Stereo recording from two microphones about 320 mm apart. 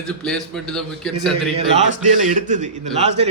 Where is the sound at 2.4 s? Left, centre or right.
Right.